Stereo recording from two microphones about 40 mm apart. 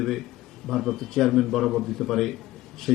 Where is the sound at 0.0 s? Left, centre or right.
Centre.